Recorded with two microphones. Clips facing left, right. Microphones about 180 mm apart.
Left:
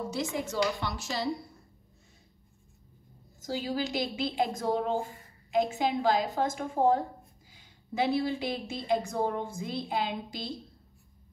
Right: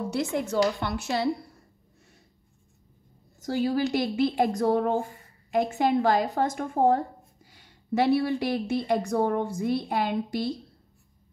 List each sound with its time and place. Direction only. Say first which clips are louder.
0.1 s a woman's voice: right 5 dB; 60° right (ahead or behind)
3.3 s a woman's voice: right 6 dB; 60° right (ahead or behind)